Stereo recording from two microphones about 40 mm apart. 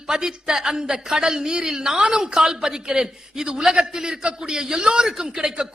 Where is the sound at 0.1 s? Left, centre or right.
Centre.